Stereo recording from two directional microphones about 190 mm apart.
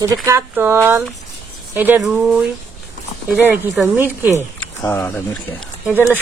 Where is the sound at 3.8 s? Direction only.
10° right (ahead or behind).